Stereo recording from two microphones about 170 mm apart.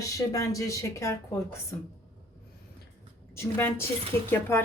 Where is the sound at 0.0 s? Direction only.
20° left (ahead or behind).